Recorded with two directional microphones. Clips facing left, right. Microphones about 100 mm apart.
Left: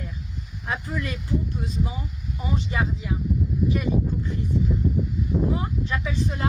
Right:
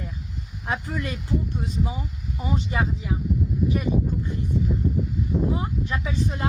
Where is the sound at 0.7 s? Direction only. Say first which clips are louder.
Right 1 dB; 30° right (ahead or behind).